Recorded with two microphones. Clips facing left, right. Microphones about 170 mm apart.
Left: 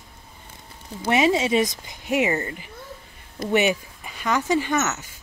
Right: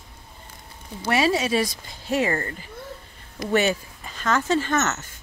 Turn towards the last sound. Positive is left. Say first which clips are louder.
# even
turn(degrees=10)  # may be behind; listen again after turning